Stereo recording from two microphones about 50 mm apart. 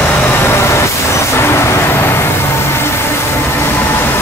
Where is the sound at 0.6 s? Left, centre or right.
Left.